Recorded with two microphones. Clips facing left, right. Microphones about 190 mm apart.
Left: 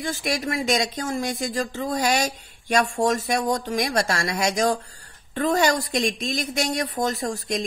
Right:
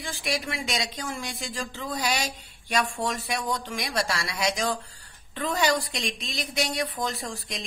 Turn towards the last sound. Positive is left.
turn(degrees=45)  # may be behind; listen again after turning